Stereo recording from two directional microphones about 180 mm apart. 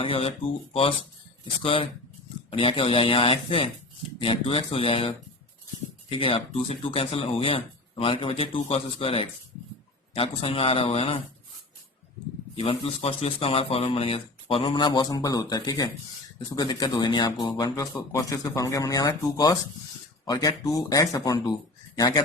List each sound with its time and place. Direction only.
0.0 s speech: 30° left (ahead or behind)
12.5 s speech: 30° left (ahead or behind)